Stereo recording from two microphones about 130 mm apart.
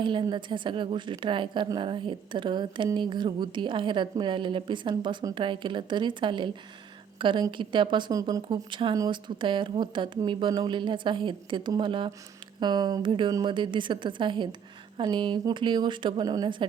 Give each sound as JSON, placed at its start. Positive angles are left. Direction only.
{"t": 0.0, "sound": "a woman's voice", "side_deg": -40}